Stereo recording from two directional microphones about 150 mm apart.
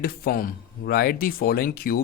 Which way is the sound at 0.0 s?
80° left.